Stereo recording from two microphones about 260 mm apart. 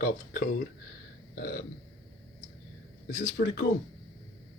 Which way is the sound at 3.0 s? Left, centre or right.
Left.